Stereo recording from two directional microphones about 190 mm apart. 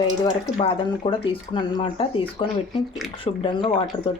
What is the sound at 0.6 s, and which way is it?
Speech, 25° left (ahead or behind).